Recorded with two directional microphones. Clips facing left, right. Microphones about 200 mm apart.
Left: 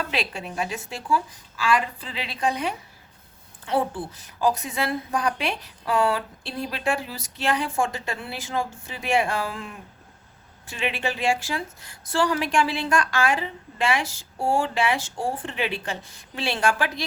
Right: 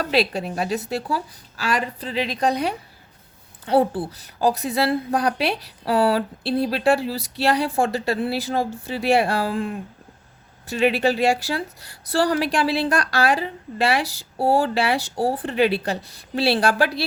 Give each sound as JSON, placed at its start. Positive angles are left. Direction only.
{"t": 0.0, "sound": "speech", "side_deg": -40}